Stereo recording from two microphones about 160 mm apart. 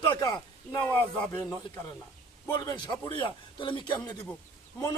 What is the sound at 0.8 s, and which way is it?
Speech, 10° left (ahead or behind).